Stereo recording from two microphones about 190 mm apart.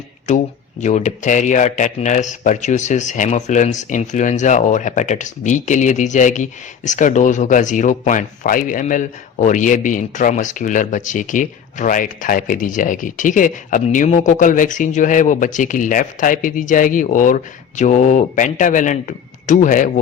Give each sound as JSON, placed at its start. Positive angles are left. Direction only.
{"t": 0.3, "sound": "speech", "side_deg": 40}